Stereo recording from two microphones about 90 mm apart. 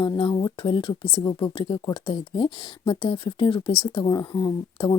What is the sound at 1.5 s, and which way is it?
Speech, 65° left (ahead or behind).